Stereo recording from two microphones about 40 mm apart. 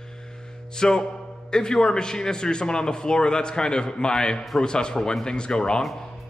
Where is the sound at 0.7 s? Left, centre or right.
Centre.